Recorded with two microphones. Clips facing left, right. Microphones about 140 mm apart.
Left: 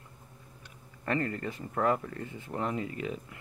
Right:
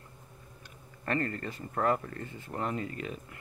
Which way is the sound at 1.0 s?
15° left (ahead or behind).